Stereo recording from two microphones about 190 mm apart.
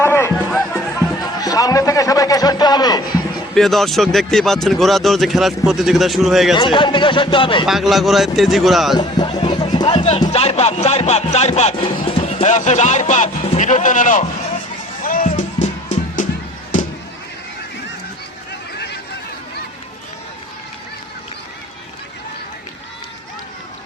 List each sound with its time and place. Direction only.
0.0 s music: 15° left (ahead or behind)
1.2 s a sound: 20° left (ahead or behind)
3.5 s speech: centre (ahead or behind)
6.6 s speech: 25° left (ahead or behind)
7.7 s speech: centre (ahead or behind)
9.0 s speech: 25° left (ahead or behind); by 14.3 s 40° left (ahead or behind)
15.0 s music: 45° left (ahead or behind)